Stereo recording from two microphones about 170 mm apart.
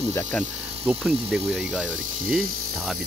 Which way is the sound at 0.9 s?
5° right (ahead or behind).